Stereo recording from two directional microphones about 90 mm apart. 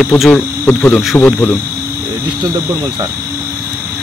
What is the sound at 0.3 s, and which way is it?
Speech, 15° left (ahead or behind).